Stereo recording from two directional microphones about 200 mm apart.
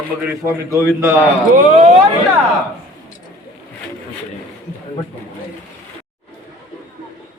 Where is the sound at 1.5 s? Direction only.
40° right (ahead or behind).